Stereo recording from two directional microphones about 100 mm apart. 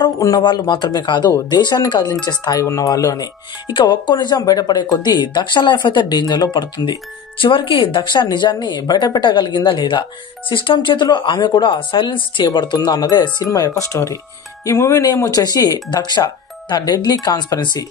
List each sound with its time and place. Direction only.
0.4 s speech: 50° left (ahead or behind)
3.7 s speech: 50° left (ahead or behind)
12.4 s speech: 45° left (ahead or behind)